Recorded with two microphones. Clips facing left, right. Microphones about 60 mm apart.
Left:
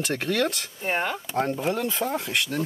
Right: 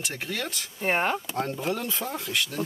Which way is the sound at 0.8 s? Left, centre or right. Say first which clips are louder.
Right 2 dB; right.